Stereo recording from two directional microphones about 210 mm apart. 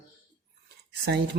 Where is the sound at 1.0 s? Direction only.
50° right (ahead or behind).